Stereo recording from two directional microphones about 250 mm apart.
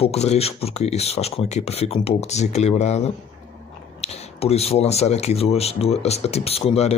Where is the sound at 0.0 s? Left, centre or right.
Left.